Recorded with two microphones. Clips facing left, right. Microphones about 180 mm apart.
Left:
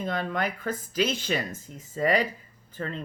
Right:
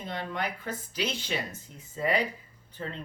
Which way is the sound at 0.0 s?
50° left (ahead or behind).